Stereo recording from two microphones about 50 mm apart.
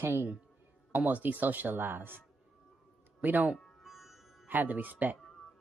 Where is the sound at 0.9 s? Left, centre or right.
Right.